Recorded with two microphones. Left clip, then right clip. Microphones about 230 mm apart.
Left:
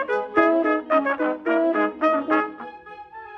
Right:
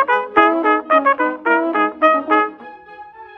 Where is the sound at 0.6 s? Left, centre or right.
Right.